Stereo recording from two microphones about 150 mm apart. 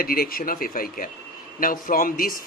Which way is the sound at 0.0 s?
80° left.